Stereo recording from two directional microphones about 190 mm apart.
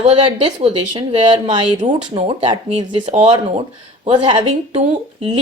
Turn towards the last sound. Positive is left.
turn(degrees=-35)  # may be behind; listen again after turning